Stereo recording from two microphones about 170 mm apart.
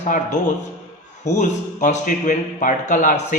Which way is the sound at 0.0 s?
45° left (ahead or behind).